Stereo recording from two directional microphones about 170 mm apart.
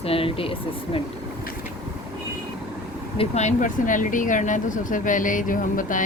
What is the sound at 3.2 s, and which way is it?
Speech, 40° left (ahead or behind).